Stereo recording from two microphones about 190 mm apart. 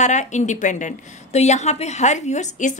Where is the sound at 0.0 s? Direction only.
40° left (ahead or behind).